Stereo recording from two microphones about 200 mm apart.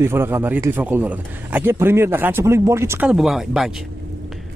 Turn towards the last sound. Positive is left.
turn(degrees=0)  # may be behind; listen again after turning